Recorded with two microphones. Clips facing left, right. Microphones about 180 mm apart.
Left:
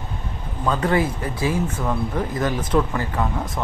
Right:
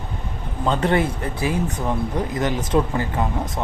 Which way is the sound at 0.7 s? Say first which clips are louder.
Right 1 dB; 25° right (ahead or behind).